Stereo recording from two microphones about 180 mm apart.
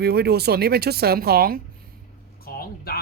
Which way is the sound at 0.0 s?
60° right (ahead or behind).